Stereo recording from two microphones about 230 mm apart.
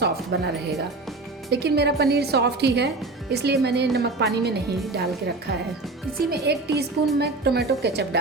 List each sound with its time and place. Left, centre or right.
0.3 s a woman's voice: right